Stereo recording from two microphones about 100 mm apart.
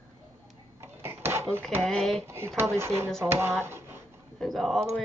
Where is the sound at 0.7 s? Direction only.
25° right (ahead or behind).